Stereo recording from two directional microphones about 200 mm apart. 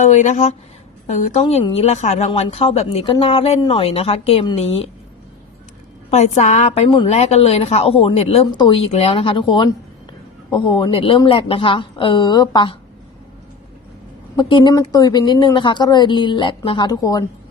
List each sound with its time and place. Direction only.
0.0 s a woman's voice: 35° left (ahead or behind)
6.1 s a woman's voice: 35° left (ahead or behind)
10.7 s a woman's voice: 20° left (ahead or behind)
14.3 s a woman's voice: 25° left (ahead or behind)